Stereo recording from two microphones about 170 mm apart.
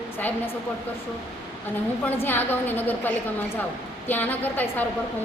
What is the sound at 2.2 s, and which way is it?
A woman's voice, 10° left (ahead or behind).